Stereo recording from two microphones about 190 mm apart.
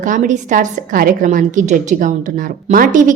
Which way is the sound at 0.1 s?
45° right (ahead or behind).